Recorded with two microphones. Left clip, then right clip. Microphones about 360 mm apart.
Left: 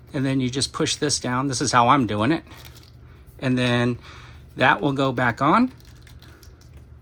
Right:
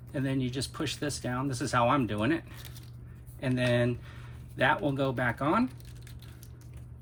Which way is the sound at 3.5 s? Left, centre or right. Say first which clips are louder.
Left 6 dB; left.